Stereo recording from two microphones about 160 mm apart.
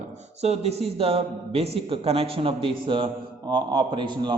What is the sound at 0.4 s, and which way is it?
A man's voice, 40° right (ahead or behind).